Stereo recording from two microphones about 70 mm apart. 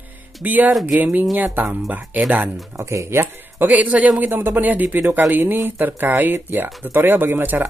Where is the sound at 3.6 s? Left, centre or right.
Centre.